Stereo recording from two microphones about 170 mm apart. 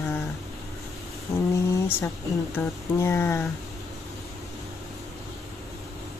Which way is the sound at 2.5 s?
15° left (ahead or behind).